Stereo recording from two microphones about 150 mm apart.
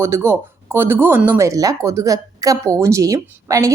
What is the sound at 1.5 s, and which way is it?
A woman's voice, 25° right (ahead or behind).